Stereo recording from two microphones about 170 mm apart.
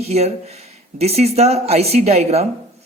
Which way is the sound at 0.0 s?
40° right (ahead or behind).